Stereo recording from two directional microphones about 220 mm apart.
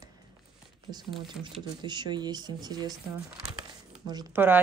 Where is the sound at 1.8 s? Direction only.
20° right (ahead or behind).